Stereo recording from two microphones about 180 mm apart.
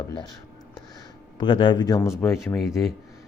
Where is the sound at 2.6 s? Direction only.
Centre (ahead or behind).